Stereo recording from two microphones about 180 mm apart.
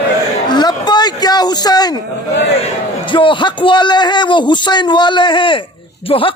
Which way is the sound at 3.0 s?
25° left (ahead or behind).